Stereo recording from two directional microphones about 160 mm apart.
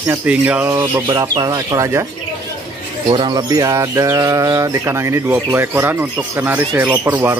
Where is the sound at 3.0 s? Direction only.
25° right (ahead or behind).